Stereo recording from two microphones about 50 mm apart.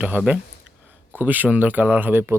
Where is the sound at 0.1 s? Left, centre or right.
Right.